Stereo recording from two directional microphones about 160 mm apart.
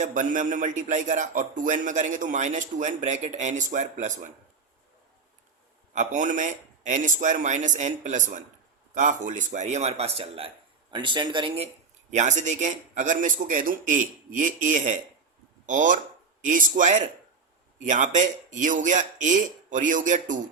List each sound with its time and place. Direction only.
0.0 s a man's voice: 50° right (ahead or behind)
5.9 s a man's voice: 50° right (ahead or behind)
12.1 s a man's voice: 50° right (ahead or behind)